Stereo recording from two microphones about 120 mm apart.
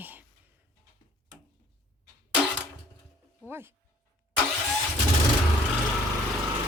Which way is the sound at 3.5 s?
20° right (ahead or behind).